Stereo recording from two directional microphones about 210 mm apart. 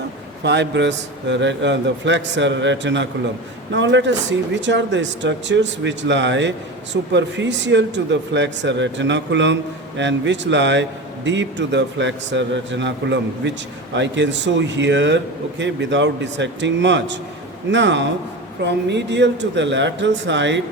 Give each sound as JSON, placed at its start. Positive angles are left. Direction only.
{"t": 0.4, "sound": "speech", "side_deg": -55}